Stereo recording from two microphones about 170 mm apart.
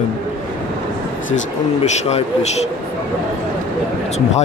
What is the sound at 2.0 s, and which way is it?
Speech, 40° left (ahead or behind).